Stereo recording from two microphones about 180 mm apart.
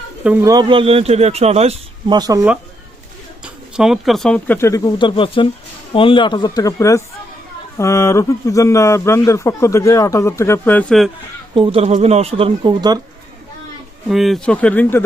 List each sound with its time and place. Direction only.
0.3 s a man's voice: 10° right (ahead or behind)
0.5 s a man's voice: 25° right (ahead or behind)
2.1 s speech: 20° right (ahead or behind)
3.4 s speech: 5° right (ahead or behind)
11.5 s a man's voice: 30° right (ahead or behind)
14.1 s speech: centre (ahead or behind)